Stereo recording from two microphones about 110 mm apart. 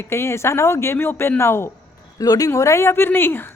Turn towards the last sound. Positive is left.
turn(degrees=20)  # may be behind; listen again after turning